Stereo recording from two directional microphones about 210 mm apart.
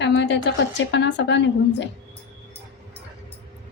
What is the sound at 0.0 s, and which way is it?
Speech, 55° left (ahead or behind).